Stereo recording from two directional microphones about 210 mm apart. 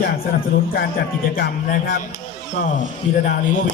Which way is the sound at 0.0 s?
45° left (ahead or behind).